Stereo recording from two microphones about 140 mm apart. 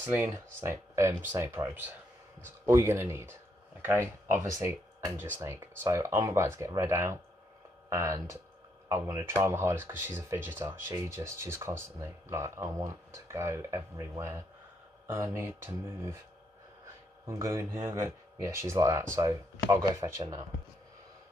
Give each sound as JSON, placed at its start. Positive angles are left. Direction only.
{"t": 0.0, "sound": "speech", "side_deg": -15}
{"t": 17.3, "sound": "speech", "side_deg": -20}